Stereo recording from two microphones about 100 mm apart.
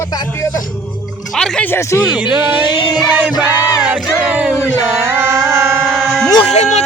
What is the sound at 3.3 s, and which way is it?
Music, 40° left (ahead or behind).